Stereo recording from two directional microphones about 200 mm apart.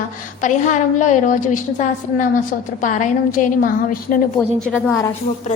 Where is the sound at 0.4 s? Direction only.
40° left (ahead or behind).